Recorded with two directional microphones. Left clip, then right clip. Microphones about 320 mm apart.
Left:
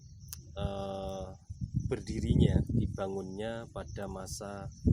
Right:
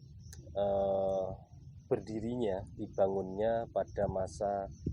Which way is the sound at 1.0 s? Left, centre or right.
Left.